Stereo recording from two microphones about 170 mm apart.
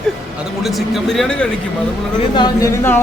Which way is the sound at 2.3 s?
25° left (ahead or behind).